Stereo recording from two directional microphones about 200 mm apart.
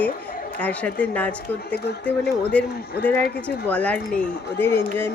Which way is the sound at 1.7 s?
55° left (ahead or behind).